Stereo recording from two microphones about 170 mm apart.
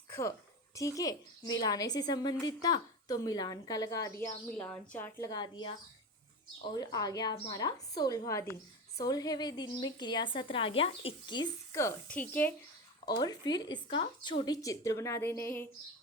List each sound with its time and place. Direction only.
0.1 s a woman's voice: 15° left (ahead or behind)
4.6 s a woman's voice: 5° left (ahead or behind)
5.3 s a woman's voice: 25° left (ahead or behind)
6.7 s a woman's voice: 20° left (ahead or behind)
13.1 s a woman's voice: 25° left (ahead or behind)